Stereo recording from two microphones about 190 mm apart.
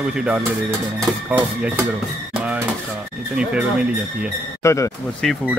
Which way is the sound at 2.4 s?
5° right (ahead or behind).